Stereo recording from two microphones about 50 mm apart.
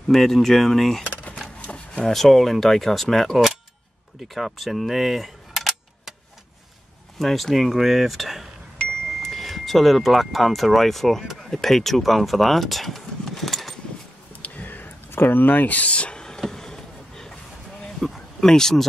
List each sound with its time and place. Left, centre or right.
0.1 s speech: centre
2.0 s speech: centre
7.2 s speech: centre
14.4 s a sound: left
15.0 s speech: left; by 16.3 s centre
16.4 s vehicle: centre
18.0 s speech: centre